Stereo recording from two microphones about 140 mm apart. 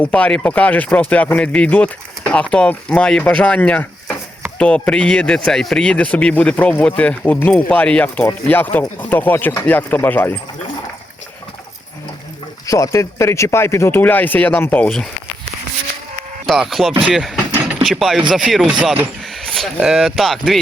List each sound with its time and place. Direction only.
0.0 s speech: 10° left (ahead or behind)
12.6 s speech: 25° left (ahead or behind)
16.5 s speech: centre (ahead or behind)